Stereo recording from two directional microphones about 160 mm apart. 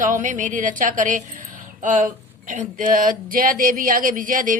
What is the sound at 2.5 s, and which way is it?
A woman's voice, 55° right (ahead or behind).